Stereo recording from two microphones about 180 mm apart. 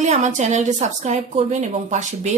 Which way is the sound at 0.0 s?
40° right (ahead or behind).